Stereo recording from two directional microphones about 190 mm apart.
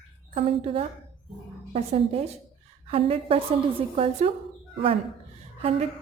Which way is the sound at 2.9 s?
30° right (ahead or behind).